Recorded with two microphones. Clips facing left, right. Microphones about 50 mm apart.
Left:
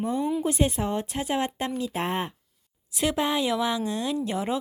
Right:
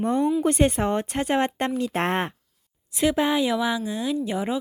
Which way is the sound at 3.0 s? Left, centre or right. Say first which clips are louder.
Right 4 dB; centre.